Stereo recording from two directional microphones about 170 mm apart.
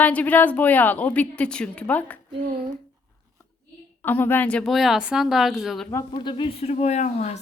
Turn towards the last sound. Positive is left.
turn(degrees=40)  # may be behind; listen again after turning